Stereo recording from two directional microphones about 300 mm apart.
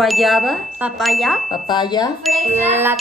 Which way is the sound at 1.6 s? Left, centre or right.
Centre.